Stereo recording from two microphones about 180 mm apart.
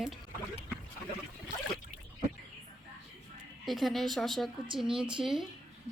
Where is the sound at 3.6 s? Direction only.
Centre (ahead or behind).